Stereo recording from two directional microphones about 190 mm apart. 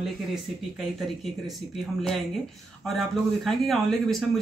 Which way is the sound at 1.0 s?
Centre (ahead or behind).